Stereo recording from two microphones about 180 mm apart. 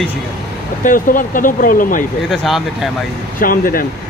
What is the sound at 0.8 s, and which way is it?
Speech, 50° left (ahead or behind).